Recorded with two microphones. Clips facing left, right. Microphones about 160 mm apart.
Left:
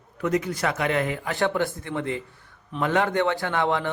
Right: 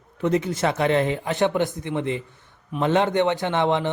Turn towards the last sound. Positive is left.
turn(degrees=-20)  # may be behind; listen again after turning